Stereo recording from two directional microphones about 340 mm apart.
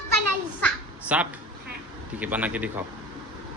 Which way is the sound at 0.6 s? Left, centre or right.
Centre.